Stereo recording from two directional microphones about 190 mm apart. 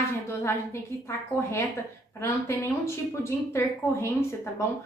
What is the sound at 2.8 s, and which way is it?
A woman's voice, 15° left (ahead or behind).